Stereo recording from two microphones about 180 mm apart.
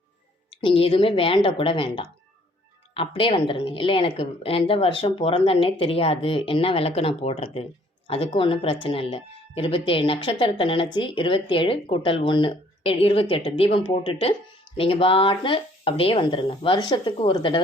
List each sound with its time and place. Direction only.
0.6 s a woman's voice: 30° left (ahead or behind)